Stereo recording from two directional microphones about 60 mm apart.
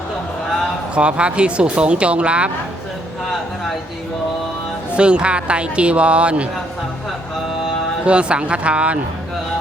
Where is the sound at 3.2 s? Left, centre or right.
Centre.